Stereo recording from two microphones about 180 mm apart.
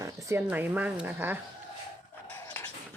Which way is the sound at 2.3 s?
10° left (ahead or behind).